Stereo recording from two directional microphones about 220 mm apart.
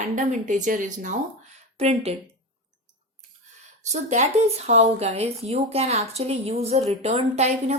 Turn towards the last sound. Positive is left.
turn(degrees=-30)  # may be behind; listen again after turning